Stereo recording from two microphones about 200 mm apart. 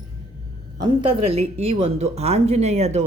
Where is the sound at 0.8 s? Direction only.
30° right (ahead or behind).